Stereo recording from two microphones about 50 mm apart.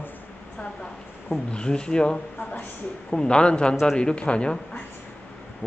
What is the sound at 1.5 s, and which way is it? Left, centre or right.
A man's voice, centre.